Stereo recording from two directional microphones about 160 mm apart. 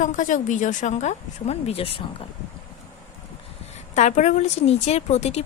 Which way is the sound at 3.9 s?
45° left (ahead or behind).